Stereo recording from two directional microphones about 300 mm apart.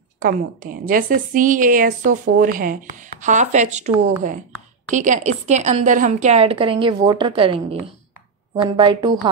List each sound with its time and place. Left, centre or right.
0.2 s a woman's voice: right
4.9 s a woman's voice: right